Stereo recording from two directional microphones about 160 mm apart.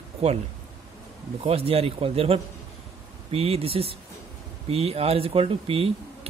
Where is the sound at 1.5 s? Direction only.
40° right (ahead or behind).